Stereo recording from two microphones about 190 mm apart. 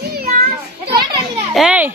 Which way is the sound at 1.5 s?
5° right (ahead or behind).